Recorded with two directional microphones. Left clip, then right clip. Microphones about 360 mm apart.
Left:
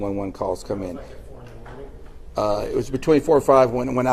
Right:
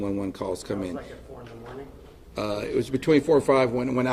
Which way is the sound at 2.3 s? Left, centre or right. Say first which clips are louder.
Left 6 dB; centre.